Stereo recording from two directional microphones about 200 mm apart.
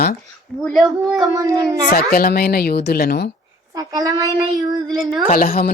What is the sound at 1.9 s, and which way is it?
A woman's voice, 50° left (ahead or behind).